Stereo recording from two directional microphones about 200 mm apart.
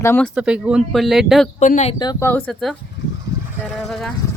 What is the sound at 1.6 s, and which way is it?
Speech, 35° left (ahead or behind).